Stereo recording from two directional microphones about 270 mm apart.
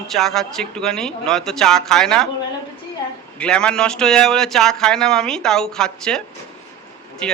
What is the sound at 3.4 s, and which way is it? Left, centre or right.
Speech, centre.